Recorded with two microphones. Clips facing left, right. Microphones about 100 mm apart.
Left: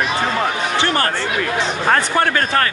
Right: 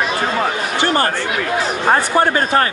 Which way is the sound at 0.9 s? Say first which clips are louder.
Right 2 dB; 25° right (ahead or behind).